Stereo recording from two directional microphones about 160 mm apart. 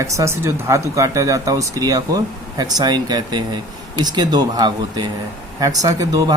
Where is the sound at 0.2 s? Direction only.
20° right (ahead or behind).